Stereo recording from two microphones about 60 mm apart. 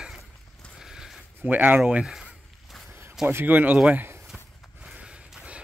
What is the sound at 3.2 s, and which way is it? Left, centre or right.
Speech, right.